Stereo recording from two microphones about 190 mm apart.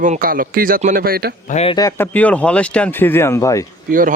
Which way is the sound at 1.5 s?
35° left (ahead or behind).